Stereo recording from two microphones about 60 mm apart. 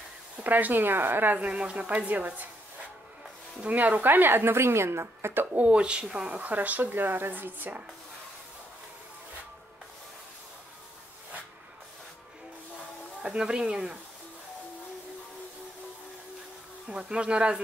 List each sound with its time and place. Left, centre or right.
0.4 s a woman's voice: right
1.5 s a woman's voice: centre
3.6 s a woman's voice: right
5.6 s a woman's voice: centre
13.2 s speech: centre
16.8 s speech: centre